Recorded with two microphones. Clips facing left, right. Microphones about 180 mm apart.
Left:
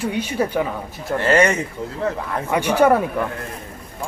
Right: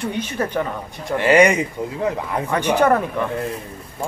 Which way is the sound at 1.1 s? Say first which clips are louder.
Right 2 dB; 15° right (ahead or behind).